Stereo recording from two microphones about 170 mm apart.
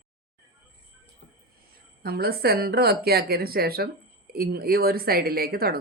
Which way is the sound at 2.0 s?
65° right (ahead or behind).